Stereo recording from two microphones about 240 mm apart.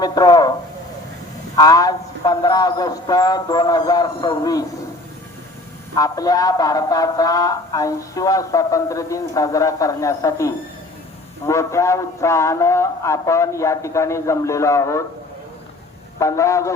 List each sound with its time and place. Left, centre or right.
0.0 s a sound: centre
1.5 s speech: centre
5.9 s speech: centre
16.1 s speech: centre